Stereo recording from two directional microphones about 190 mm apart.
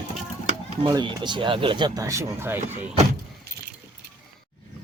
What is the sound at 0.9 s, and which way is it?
Speech, 20° right (ahead or behind).